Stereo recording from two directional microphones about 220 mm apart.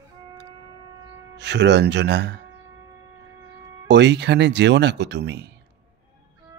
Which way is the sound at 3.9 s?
50° right (ahead or behind).